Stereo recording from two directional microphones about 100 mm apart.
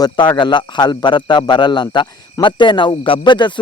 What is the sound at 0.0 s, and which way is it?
Speech, 50° left (ahead or behind).